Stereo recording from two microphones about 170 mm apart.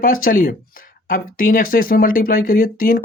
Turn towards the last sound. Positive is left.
turn(degrees=55)  # may be behind; listen again after turning